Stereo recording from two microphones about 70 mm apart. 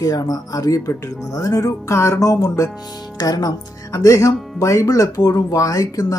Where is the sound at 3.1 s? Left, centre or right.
Left.